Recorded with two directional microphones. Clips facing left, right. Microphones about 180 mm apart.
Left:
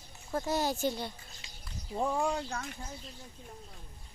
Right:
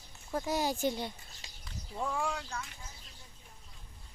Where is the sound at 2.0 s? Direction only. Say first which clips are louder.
Left 4 dB; 25° left (ahead or behind).